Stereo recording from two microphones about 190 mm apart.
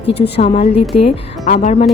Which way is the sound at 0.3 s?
30° left (ahead or behind).